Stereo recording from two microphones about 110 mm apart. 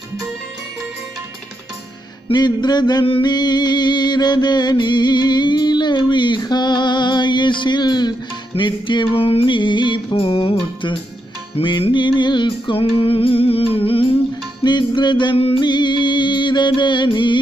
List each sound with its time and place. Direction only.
2.3 s music: 40° left (ahead or behind); by 14.1 s 60° left (ahead or behind)
14.6 s music: 45° left (ahead or behind)
15.3 s music: 60° left (ahead or behind)
15.6 s music: 45° left (ahead or behind)